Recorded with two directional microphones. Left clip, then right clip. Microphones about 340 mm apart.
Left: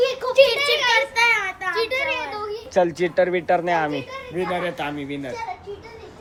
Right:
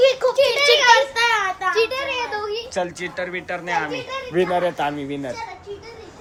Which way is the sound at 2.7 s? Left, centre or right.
Centre.